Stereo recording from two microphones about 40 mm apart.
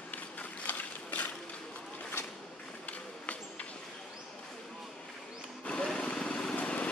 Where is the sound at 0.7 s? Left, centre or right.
Left.